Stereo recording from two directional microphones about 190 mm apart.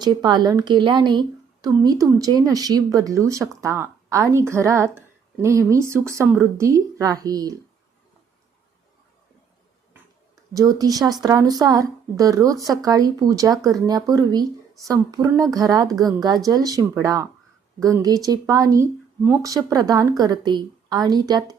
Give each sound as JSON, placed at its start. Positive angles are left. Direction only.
{"t": 0.0, "sound": "a woman's voice", "side_deg": -20}
{"t": 10.5, "sound": "a woman's voice", "side_deg": -20}